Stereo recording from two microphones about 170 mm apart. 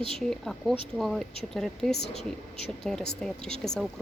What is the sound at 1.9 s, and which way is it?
Speech, 75° left (ahead or behind).